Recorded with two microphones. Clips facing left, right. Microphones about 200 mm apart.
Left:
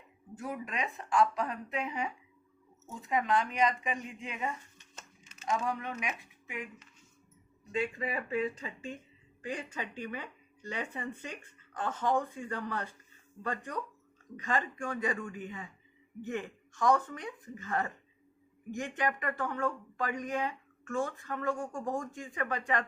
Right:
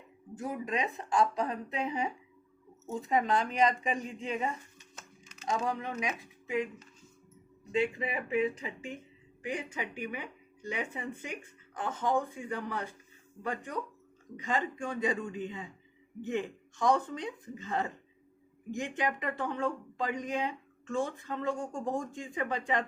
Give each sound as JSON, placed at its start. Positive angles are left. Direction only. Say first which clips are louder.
{"t": 0.3, "sound": "a woman's voice", "louder": "right 3 dB", "side_deg": -20}
{"t": 7.7, "sound": "a woman's voice", "louder": "right 3 dB", "side_deg": -20}
{"t": 14.3, "sound": "speech", "louder": "right 1 dB", "side_deg": -15}